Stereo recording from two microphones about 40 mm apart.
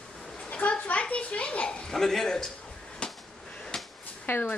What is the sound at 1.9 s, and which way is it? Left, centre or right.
Speech, centre.